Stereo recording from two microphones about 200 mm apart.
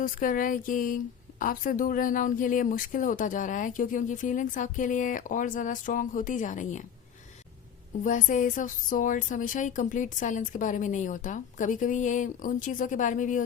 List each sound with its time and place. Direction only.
0.0 s a woman's voice: 40° left (ahead or behind)
8.0 s a woman's voice: 40° left (ahead or behind)